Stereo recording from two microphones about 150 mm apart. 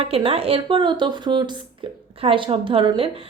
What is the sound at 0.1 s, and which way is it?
A woman's voice, 40° right (ahead or behind).